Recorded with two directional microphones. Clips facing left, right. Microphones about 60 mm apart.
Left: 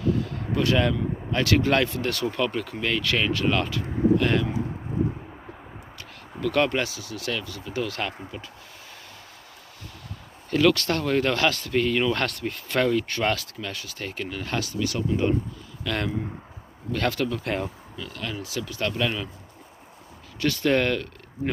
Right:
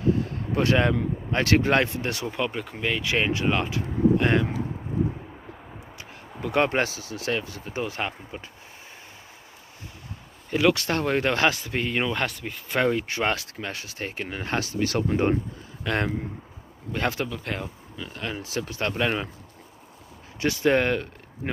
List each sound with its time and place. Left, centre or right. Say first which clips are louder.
0.0 s a sound: right 1 dB; right
0.6 s speech: right 1 dB; right
2.3 s speech: left 2 dB; centre
6.4 s speech: even; right
10.5 s speech: left 1 dB; centre
12.1 s speech: left 2 dB; centre
12.8 s speech: even; right
15.8 s speech: right 1 dB; right
17.3 s speech: left 4 dB; centre
17.9 s speech: right 3 dB; right
20.3 s speech: right 1 dB; centre